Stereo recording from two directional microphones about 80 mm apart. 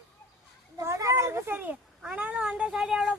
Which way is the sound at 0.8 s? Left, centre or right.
Right.